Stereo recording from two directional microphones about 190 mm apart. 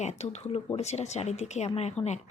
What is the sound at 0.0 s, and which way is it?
Speech, 35° left (ahead or behind).